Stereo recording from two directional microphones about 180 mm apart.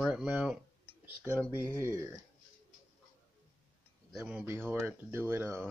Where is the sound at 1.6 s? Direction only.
15° right (ahead or behind).